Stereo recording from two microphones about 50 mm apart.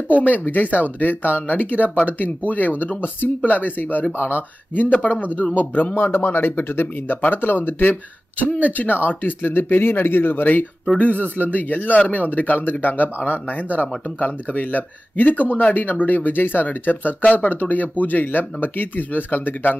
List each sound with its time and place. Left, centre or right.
0.1 s speech: left